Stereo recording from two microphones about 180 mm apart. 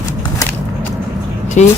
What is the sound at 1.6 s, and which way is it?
Speech, 40° left (ahead or behind).